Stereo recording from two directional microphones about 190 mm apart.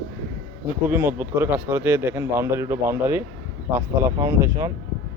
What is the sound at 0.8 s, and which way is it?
Speech, 10° right (ahead or behind).